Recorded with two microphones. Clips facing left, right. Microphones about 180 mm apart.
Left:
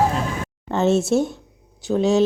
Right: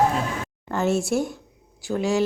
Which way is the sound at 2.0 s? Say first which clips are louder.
Left 5 dB; 20° left (ahead or behind).